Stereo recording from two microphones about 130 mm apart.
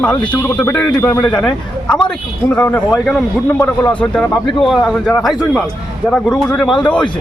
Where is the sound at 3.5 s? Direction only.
15° left (ahead or behind).